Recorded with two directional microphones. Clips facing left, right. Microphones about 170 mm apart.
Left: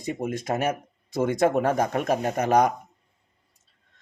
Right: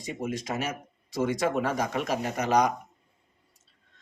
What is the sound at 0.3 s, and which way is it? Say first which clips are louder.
Speech: left 6 dB; 55° left (ahead or behind).